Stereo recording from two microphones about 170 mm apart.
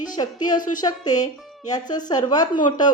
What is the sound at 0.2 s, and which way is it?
Speech, 25° left (ahead or behind).